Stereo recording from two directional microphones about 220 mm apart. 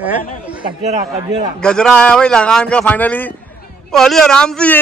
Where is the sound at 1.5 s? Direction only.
5° left (ahead or behind).